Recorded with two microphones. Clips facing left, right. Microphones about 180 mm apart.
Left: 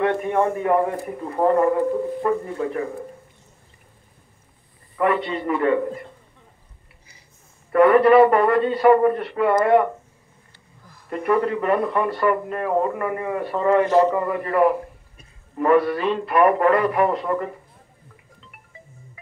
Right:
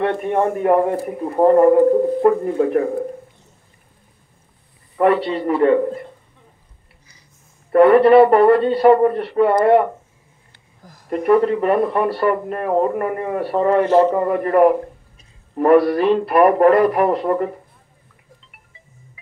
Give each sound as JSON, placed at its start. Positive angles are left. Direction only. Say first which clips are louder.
{"t": 0.3, "sound": "speech", "louder": "right 6 dB", "side_deg": -45}
{"t": 4.9, "sound": "a man's voice", "louder": "right 5 dB", "side_deg": -35}
{"t": 7.7, "sound": "a man's voice", "louder": "right 3 dB", "side_deg": -35}